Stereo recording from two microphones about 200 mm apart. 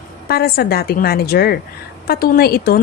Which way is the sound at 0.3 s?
50° left (ahead or behind).